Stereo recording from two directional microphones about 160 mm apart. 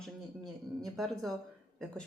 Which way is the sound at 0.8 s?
Centre (ahead or behind).